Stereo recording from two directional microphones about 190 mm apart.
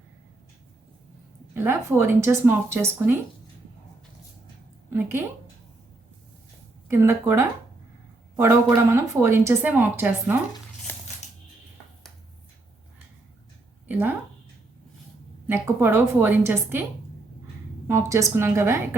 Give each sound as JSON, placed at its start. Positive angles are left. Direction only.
{"t": 1.5, "sound": "speech", "side_deg": -10}
{"t": 4.9, "sound": "speech", "side_deg": -10}
{"t": 6.9, "sound": "speech", "side_deg": -15}
{"t": 8.9, "sound": "speech", "side_deg": -15}
{"t": 11.2, "sound": "music", "side_deg": 35}
{"t": 13.8, "sound": "speech", "side_deg": -10}
{"t": 15.4, "sound": "speech", "side_deg": -10}
{"t": 17.8, "sound": "speech", "side_deg": -15}